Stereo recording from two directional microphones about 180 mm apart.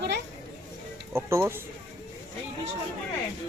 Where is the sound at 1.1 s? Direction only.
15° right (ahead or behind).